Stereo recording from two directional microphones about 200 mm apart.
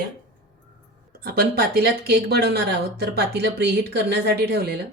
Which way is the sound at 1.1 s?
50° right (ahead or behind).